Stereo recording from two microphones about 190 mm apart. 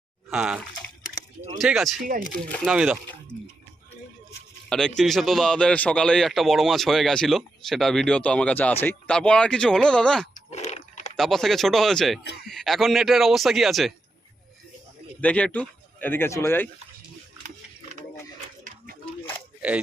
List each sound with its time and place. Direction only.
0.3 s a man's voice: 5° right (ahead or behind)
4.7 s a man's voice: centre (ahead or behind)
10.3 s a sound: 35° left (ahead or behind)
11.2 s a man's voice: centre (ahead or behind)
15.2 s speech: 5° left (ahead or behind)
19.6 s speech: 5° right (ahead or behind)